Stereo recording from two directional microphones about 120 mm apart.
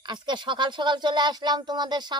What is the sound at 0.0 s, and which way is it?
A woman's voice, 40° right (ahead or behind).